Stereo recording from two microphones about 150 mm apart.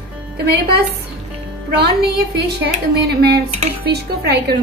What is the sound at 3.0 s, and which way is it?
A woman's voice, 90° right.